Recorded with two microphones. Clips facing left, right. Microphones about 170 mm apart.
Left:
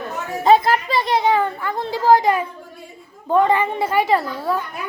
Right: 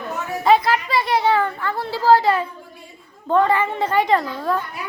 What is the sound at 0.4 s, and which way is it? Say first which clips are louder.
Speech: left 2 dB; 45° left (ahead or behind).